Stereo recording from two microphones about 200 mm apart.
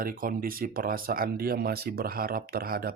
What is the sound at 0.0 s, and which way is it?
Speech, 45° right (ahead or behind).